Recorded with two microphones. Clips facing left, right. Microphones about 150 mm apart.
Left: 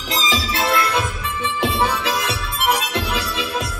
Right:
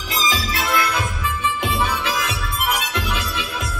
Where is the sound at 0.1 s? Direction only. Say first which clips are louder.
Left 1 dB; 30° left (ahead or behind).